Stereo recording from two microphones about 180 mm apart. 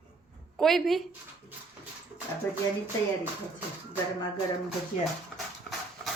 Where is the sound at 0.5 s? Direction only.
Centre (ahead or behind).